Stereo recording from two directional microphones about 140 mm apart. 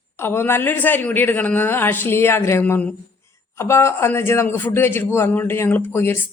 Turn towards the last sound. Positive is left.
turn(degrees=15)  # may be behind; listen again after turning